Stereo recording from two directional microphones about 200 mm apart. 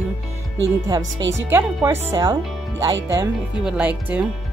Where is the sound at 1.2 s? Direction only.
65° right (ahead or behind).